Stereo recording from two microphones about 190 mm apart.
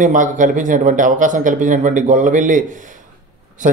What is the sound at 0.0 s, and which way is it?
Speech, 40° right (ahead or behind).